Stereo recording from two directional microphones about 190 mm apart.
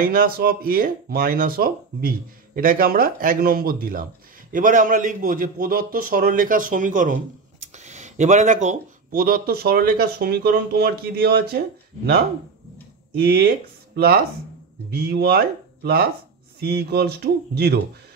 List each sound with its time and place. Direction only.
0.0 s speech: 50° right (ahead or behind)
13.1 s speech: 55° right (ahead or behind)